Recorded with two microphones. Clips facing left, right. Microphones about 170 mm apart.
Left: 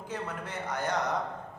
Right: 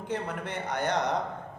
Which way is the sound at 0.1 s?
65° right (ahead or behind).